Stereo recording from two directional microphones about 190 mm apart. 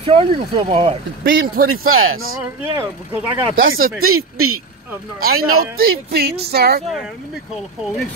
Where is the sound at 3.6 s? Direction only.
90° right.